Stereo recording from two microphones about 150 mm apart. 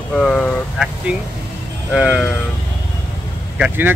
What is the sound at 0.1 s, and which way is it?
Speech, 5° left (ahead or behind).